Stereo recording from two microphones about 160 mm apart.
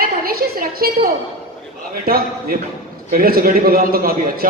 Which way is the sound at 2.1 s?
65° right (ahead or behind).